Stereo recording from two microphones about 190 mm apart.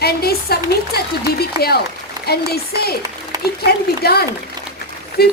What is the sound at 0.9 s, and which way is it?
Speech, 55° left (ahead or behind).